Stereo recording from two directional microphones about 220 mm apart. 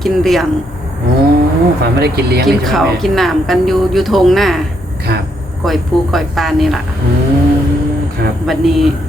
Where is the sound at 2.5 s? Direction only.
Centre (ahead or behind).